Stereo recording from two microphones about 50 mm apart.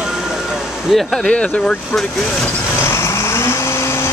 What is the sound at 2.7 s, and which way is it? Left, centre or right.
Vehicle, left.